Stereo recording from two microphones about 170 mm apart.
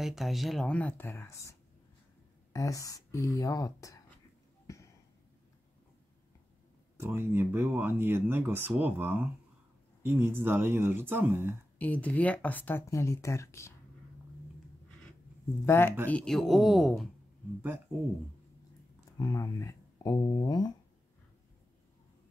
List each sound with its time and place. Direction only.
0.0 s speech: centre (ahead or behind); by 4.0 s 20° left (ahead or behind)
7.0 s speech: 10° right (ahead or behind)
11.8 s speech: 10° left (ahead or behind)
15.6 s speech: 15° left (ahead or behind)
19.1 s speech: 20° left (ahead or behind)